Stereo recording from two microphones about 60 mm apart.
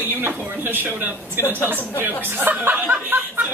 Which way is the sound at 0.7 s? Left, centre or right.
Right.